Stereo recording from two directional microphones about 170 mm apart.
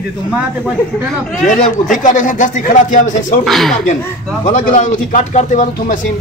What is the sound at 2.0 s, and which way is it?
A man's voice, 50° left (ahead or behind).